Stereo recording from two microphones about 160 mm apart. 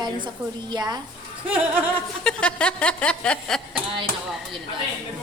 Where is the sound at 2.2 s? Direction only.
5° left (ahead or behind).